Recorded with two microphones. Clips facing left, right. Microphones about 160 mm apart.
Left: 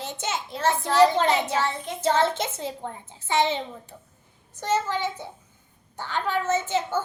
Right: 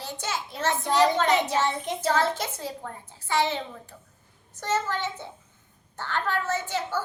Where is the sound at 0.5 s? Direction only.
20° right (ahead or behind).